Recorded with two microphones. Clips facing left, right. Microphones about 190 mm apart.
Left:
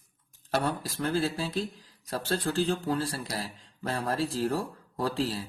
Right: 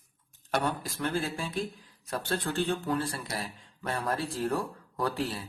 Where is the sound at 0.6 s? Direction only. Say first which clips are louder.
Left 1 dB; 35° left (ahead or behind).